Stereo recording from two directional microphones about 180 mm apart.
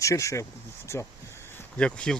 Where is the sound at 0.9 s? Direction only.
15° left (ahead or behind).